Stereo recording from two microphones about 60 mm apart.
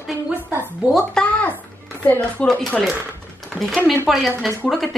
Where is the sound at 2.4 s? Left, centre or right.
Left.